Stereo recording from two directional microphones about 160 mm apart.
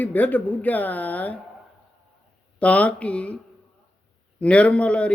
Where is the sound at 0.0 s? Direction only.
10° left (ahead or behind).